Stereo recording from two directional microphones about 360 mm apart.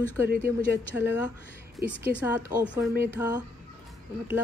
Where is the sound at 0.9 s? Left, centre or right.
Centre.